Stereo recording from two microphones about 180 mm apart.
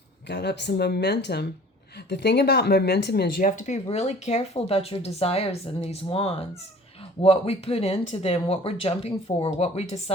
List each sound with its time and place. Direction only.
0.3 s speech: 70° left (ahead or behind); by 10.0 s 35° left (ahead or behind)